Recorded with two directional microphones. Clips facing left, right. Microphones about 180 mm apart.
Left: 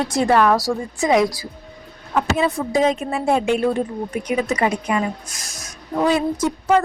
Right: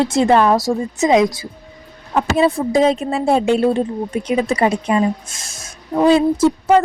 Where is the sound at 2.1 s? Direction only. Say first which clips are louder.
Right 4 dB; 30° right (ahead or behind).